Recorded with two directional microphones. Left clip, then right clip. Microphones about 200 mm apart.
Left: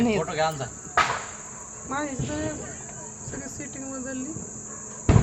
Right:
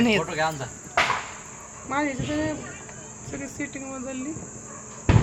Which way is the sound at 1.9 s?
55° right (ahead or behind).